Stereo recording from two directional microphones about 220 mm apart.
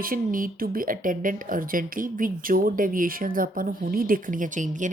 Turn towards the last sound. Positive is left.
turn(degrees=-35)  # may be behind; listen again after turning